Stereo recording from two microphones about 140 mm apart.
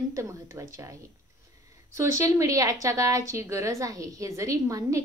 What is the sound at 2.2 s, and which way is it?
A woman's voice, 20° right (ahead or behind).